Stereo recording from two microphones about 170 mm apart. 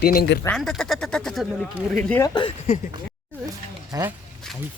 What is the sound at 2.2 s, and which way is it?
Speech, 25° left (ahead or behind).